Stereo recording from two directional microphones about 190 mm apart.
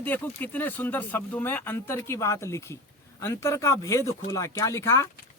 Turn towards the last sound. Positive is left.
turn(degrees=15)  # may be behind; listen again after turning